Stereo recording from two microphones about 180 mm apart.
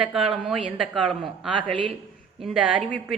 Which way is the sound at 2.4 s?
5° right (ahead or behind).